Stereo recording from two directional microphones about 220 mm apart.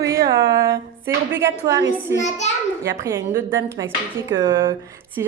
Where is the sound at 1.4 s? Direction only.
15° right (ahead or behind).